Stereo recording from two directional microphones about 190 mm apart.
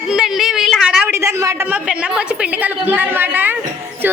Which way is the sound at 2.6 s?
10° right (ahead or behind).